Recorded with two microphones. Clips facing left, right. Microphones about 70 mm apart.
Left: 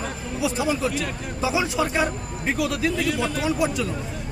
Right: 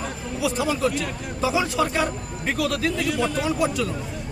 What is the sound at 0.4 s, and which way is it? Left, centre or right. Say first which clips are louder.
A man's voice: right 1 dB; centre.